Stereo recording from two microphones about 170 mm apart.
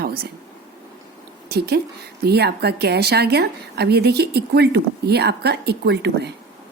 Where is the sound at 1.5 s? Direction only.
70° right (ahead or behind).